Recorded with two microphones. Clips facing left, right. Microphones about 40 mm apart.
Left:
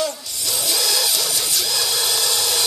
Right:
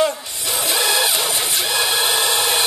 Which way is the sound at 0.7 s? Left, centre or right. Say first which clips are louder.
Right 5 dB; right.